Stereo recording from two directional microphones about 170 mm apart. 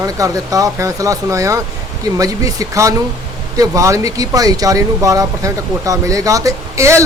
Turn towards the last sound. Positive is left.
turn(degrees=-15)  # may be behind; listen again after turning